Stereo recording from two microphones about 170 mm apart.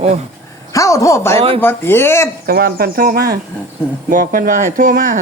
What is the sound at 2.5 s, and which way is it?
Speech, 60° right (ahead or behind).